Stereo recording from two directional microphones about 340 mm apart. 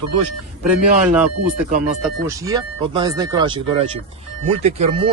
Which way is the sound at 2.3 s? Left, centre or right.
Centre.